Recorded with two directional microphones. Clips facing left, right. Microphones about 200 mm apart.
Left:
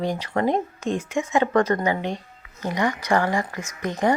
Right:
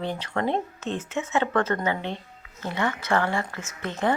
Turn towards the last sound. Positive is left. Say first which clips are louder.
# left 4 dB
turn(degrees=15)  # may be behind; listen again after turning